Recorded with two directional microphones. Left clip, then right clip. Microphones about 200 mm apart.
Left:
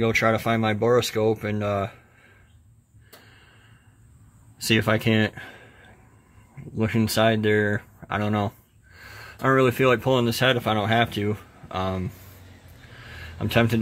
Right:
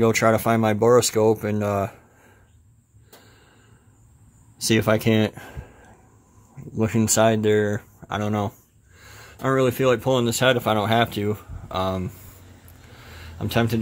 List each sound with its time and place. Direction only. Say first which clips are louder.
0.0 s speech: right 3 dB; 15° right (ahead or behind)
4.6 s speech: right 2 dB; 10° right (ahead or behind)
13.0 s a sound: left 1 dB; 5° left (ahead or behind)